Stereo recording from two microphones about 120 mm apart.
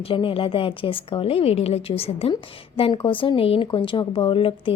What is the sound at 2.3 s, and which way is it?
A woman's voice, 45° left (ahead or behind).